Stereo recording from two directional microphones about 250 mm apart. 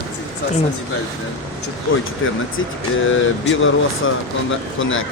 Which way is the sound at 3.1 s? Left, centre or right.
Left.